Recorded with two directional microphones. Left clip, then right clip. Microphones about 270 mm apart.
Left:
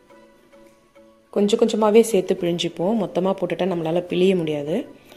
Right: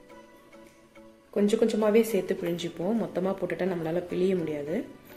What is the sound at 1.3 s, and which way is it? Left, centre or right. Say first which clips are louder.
Speech: left 6 dB; left.